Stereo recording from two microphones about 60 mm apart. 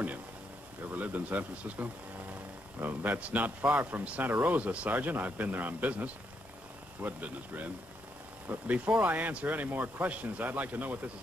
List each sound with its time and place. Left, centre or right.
0.9 s speech: right